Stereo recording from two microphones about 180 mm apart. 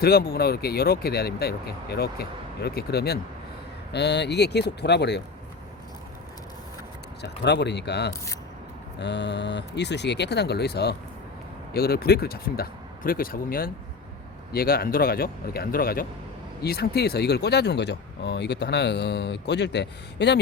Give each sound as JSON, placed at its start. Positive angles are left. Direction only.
{"t": 0.0, "sound": "speech", "side_deg": 60}
{"t": 7.2, "sound": "speech", "side_deg": 70}